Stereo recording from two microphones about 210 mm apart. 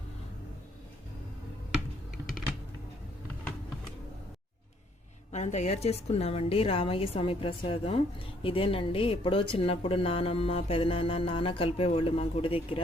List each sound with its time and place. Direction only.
5.3 s a woman's voice: 35° left (ahead or behind)